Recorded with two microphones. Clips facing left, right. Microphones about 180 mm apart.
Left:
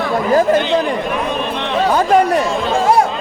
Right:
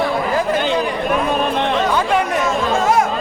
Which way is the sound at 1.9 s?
40° left (ahead or behind).